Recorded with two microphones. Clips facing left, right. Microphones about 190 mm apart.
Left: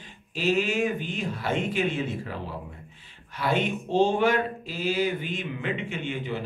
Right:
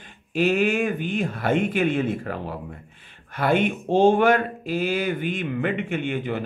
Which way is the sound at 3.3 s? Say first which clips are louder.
Right 5 dB; 55° right (ahead or behind).